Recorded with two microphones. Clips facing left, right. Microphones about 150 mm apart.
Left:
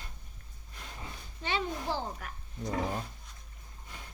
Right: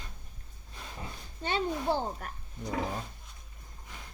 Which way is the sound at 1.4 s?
45° right (ahead or behind).